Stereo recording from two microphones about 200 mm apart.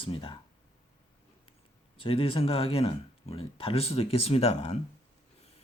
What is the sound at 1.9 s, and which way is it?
Speech, 25° left (ahead or behind).